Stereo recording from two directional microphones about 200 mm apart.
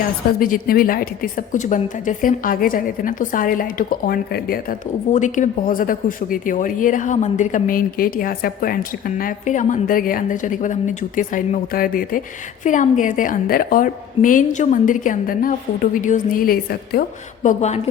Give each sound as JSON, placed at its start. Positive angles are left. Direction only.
{"t": 0.3, "sound": "a woman's voice", "side_deg": 45}